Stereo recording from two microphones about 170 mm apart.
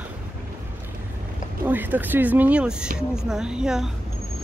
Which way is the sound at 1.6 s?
10° right (ahead or behind).